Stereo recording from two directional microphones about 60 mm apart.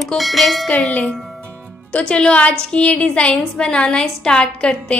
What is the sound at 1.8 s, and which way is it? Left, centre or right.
A woman's voice, centre.